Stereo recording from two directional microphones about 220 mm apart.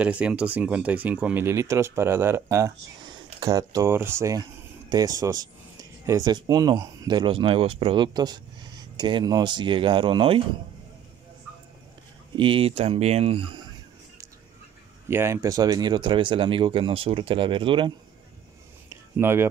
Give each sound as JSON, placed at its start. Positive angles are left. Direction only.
{"t": 0.0, "sound": "speech", "side_deg": -5}
{"t": 12.4, "sound": "speech", "side_deg": -25}
{"t": 15.0, "sound": "speech", "side_deg": -10}
{"t": 18.9, "sound": "a sound", "side_deg": -10}